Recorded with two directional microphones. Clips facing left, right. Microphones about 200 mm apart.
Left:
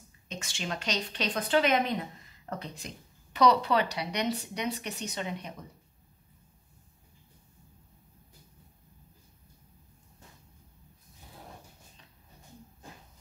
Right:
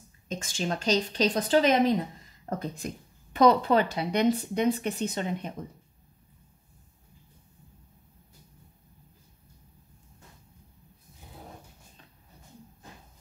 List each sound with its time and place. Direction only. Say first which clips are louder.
0.3 s a woman's voice: right 6 dB; 35° right (ahead or behind)
2.5 s a woman's voice: right 6 dB; 50° right (ahead or behind)